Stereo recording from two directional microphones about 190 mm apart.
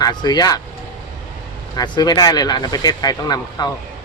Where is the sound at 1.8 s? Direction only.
20° left (ahead or behind).